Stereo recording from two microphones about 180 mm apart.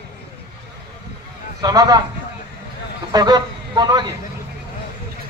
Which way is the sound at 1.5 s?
20° right (ahead or behind).